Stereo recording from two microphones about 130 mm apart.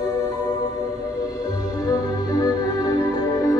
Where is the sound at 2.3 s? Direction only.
30° left (ahead or behind).